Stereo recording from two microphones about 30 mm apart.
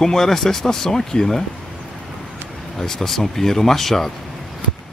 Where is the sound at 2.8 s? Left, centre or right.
Centre.